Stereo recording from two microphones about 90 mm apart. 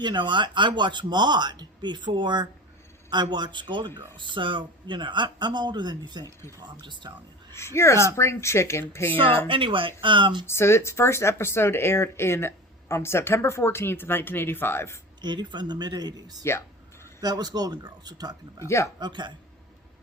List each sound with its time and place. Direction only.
0.0 s speech: 60° right (ahead or behind)
7.5 s speech: 30° left (ahead or behind)
9.5 s speech: 75° right (ahead or behind)
10.4 s speech: 30° left (ahead or behind)
15.2 s speech: 55° right (ahead or behind)
16.4 s a sound: 30° left (ahead or behind)
17.2 s speech: 45° right (ahead or behind)
18.6 s speech: 35° left (ahead or behind)
18.9 s speech: 55° right (ahead or behind)